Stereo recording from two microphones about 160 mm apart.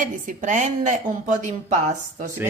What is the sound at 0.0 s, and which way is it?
Speech, 50° right (ahead or behind).